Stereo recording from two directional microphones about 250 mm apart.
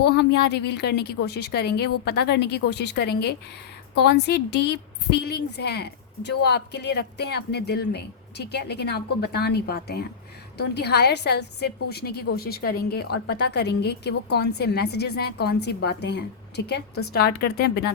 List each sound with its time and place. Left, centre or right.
0.0 s a woman's voice: left